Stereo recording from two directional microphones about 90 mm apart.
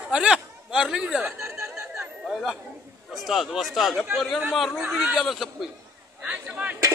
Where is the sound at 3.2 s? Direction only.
Centre (ahead or behind).